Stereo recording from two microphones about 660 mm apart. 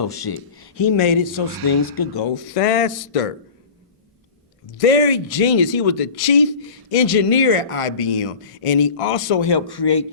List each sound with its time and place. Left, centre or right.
0.0 s speech: left
1.8 s speech: left
2.3 s speech: left
4.8 s speech: left